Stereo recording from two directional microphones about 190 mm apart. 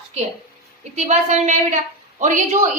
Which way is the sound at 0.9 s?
40° right (ahead or behind).